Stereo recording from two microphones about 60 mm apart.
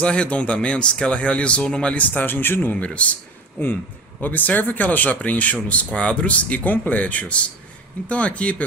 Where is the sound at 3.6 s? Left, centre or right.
Left.